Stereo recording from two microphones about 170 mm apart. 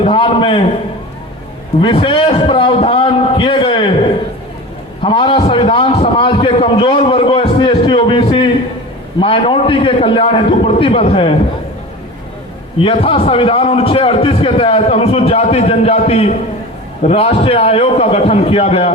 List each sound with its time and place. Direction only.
0.0 s a sound: 30° left (ahead or behind)
1.8 s a man's voice: 30° left (ahead or behind)
5.0 s a man's voice: 30° left (ahead or behind)
12.8 s a man's voice: 30° left (ahead or behind)